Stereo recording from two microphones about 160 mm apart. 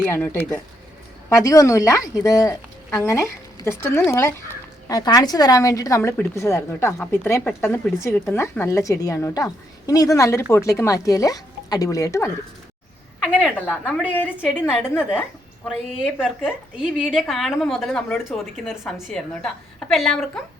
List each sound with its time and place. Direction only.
0.0 s a woman's voice: 10° left (ahead or behind)
13.4 s speech: 10° left (ahead or behind)
14.3 s a woman's voice: 5° right (ahead or behind)